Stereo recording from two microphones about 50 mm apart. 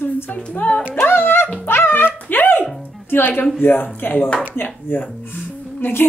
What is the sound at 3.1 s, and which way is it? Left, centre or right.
A woman's voice, left.